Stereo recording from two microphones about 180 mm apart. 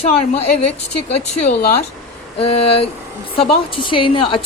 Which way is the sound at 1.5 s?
60° left (ahead or behind).